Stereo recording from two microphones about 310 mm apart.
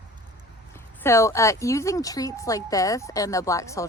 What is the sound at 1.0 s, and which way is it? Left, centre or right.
A woman's voice, centre.